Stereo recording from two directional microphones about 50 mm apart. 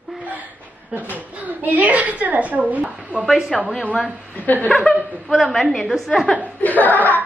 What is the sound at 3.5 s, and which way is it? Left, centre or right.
Speech, centre.